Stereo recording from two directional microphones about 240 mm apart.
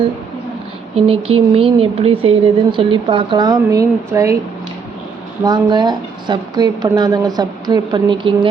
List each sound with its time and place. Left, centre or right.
0.9 s speech: right
5.5 s a woman's voice: centre